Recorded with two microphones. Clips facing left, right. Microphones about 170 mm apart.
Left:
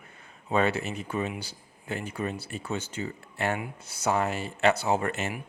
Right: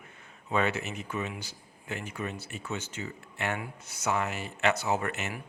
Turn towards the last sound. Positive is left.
turn(degrees=30)  # may be behind; listen again after turning